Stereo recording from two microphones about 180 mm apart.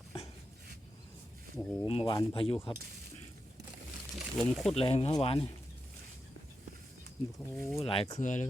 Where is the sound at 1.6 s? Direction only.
5° left (ahead or behind).